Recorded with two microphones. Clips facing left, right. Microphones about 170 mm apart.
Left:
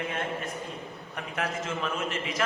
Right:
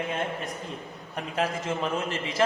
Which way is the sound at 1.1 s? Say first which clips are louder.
Right 4 dB; 30° right (ahead or behind).